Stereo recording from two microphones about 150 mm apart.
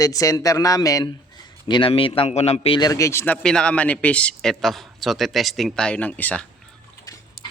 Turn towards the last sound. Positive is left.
turn(degrees=10)  # may be behind; listen again after turning